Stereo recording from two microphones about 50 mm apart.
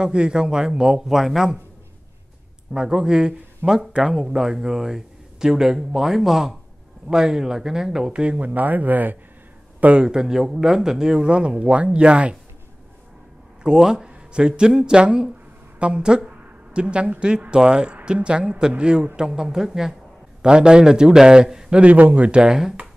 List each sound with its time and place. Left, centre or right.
0.0 s speech: centre
2.7 s speech: centre
8.1 s speech: right
9.9 s speech: centre
13.6 s a man's voice: centre
21.7 s a man's voice: right
22.4 s speech: centre